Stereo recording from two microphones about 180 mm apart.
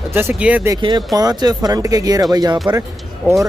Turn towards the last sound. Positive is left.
turn(degrees=-10)  # may be behind; listen again after turning